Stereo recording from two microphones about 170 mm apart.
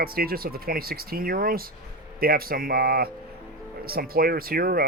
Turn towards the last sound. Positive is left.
turn(degrees=-60)  # may be behind; listen again after turning